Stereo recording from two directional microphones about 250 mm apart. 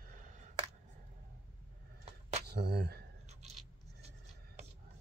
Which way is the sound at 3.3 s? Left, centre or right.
Right.